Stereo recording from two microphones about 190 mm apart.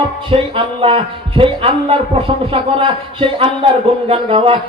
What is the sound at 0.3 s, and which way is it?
Speech, 30° right (ahead or behind).